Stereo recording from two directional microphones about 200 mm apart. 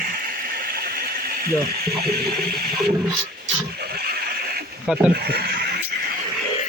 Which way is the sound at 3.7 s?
50° right (ahead or behind).